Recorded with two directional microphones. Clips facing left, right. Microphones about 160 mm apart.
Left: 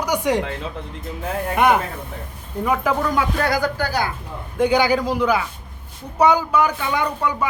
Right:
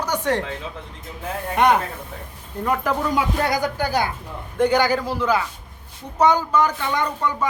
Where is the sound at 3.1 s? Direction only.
20° right (ahead or behind).